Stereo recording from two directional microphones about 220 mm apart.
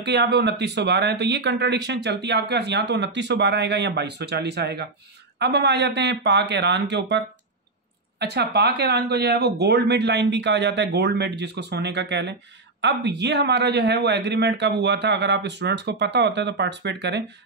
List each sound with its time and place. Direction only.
0.0 s speech: 50° right (ahead or behind)